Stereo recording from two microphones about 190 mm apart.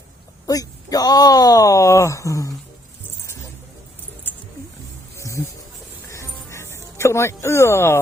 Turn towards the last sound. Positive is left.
turn(degrees=15)  # may be behind; listen again after turning